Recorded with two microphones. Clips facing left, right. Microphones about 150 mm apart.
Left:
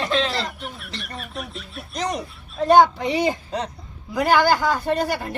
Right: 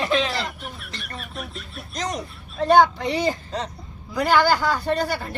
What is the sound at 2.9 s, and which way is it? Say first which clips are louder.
Speech: left 2 dB; 15° left (ahead or behind).